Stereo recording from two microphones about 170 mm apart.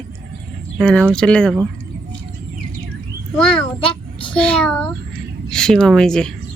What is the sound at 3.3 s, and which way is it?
Speech, 5° left (ahead or behind).